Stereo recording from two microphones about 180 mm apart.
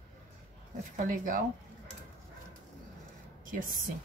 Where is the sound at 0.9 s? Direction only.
50° right (ahead or behind).